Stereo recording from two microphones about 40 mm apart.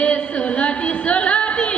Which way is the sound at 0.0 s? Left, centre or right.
Left.